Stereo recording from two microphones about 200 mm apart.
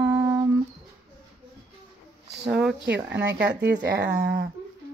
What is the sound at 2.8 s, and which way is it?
Speech, 60° right (ahead or behind).